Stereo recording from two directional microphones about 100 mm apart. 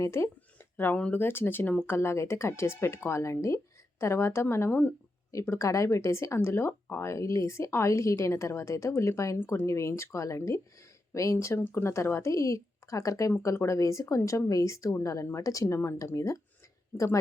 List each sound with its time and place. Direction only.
0.0 s speech: 25° left (ahead or behind)